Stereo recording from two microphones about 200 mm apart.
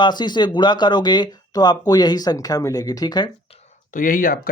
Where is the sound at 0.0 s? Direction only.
20° left (ahead or behind).